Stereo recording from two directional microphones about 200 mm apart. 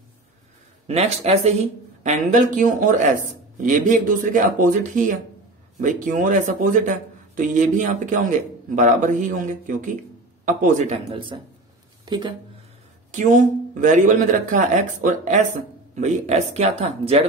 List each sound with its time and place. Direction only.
0.8 s speech: 30° right (ahead or behind)
11.3 s speech: 20° right (ahead or behind)
13.1 s speech: 40° right (ahead or behind)